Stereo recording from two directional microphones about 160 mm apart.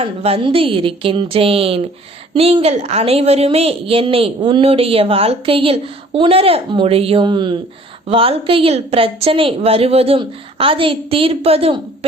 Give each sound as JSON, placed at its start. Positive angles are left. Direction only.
{"t": 0.0, "sound": "a woman's voice", "side_deg": -35}